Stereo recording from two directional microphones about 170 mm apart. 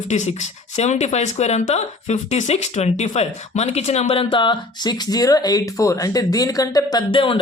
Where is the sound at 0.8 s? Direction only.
40° left (ahead or behind).